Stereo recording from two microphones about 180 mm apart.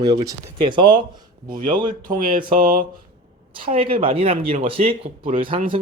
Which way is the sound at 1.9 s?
50° right (ahead or behind).